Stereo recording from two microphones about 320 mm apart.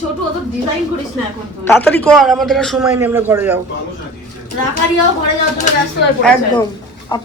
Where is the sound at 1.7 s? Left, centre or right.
Centre.